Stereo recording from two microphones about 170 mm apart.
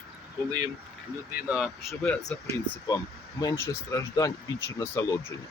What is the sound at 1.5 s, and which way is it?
Speech, centre (ahead or behind).